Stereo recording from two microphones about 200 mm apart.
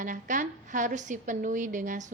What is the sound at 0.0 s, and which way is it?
A woman's voice, 40° right (ahead or behind).